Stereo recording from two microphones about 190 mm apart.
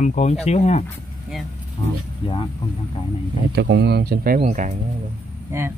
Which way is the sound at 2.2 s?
30° left (ahead or behind).